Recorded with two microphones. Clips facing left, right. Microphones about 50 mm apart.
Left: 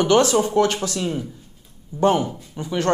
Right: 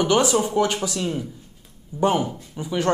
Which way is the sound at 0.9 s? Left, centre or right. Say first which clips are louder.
Left 1 dB; centre.